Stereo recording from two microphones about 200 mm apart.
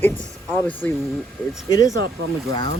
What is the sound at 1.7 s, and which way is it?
Speech, 15° left (ahead or behind).